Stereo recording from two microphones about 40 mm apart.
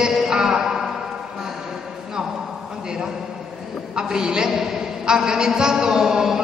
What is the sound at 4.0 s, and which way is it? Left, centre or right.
A man's voice, centre.